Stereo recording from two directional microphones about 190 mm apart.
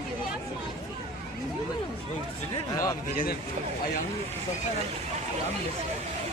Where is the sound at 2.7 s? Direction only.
15° left (ahead or behind).